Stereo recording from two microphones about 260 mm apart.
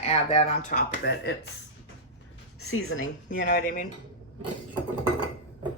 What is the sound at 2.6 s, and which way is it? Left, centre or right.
Speech, left.